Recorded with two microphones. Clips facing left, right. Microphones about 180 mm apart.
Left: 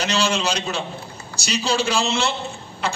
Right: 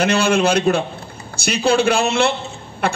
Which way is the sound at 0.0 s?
55° right (ahead or behind).